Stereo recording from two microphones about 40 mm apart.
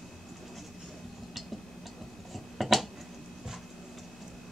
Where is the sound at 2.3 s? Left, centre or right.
Centre.